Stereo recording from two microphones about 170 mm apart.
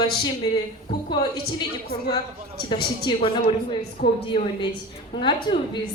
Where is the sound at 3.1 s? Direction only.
25° left (ahead or behind).